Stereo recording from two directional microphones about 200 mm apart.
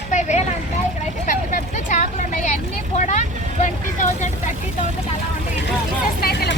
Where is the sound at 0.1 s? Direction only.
35° left (ahead or behind).